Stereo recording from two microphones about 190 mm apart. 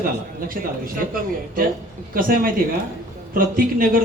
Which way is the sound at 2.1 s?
50° right (ahead or behind).